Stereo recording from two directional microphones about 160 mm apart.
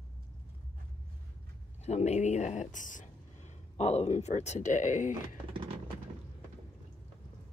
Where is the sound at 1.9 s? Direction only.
45° left (ahead or behind).